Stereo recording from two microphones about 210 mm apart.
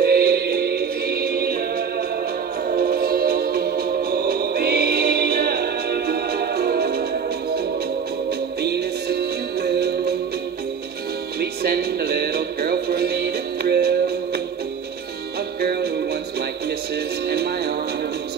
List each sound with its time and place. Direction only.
0.0 s music: 45° right (ahead or behind)
8.6 s music: 50° right (ahead or behind)
11.6 s music: 50° right (ahead or behind)
15.6 s music: 50° right (ahead or behind)
17.3 s music: 50° right (ahead or behind)